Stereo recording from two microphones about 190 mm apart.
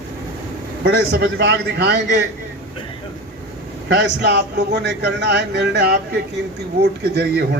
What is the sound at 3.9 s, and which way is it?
A man's voice, 60° right (ahead or behind).